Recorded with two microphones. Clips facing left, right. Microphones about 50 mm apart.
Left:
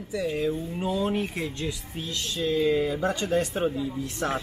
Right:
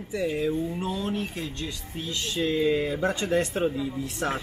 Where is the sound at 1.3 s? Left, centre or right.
Left.